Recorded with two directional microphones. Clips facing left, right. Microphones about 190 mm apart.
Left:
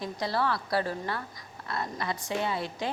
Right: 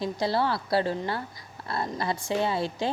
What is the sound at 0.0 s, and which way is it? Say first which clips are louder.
A woman's voice: right 4 dB; 30° right (ahead or behind).